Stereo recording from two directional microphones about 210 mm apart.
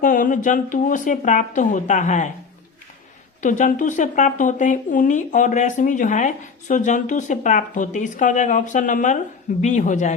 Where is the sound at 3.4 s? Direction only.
35° left (ahead or behind).